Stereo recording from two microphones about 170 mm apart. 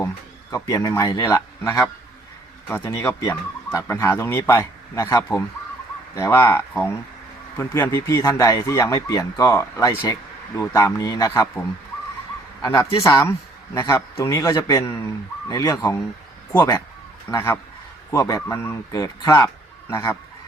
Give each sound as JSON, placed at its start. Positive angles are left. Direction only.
{"t": 0.5, "sound": "speech", "side_deg": 20}
{"t": 2.6, "sound": "speech", "side_deg": 15}
{"t": 12.6, "sound": "speech", "side_deg": 20}